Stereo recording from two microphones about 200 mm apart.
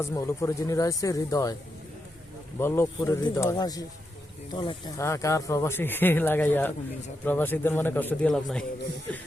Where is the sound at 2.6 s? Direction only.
10° left (ahead or behind).